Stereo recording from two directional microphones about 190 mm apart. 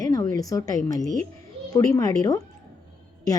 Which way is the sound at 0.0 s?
20° left (ahead or behind).